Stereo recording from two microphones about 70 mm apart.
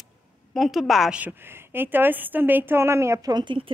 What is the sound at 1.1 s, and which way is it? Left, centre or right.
Speech, right.